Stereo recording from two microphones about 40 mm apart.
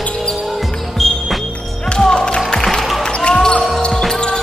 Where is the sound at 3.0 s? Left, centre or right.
Left.